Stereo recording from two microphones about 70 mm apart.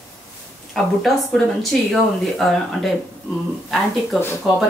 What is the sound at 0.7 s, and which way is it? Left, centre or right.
Speech, centre.